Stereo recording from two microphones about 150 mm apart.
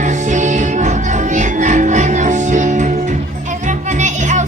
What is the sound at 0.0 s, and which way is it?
Music, 55° right (ahead or behind).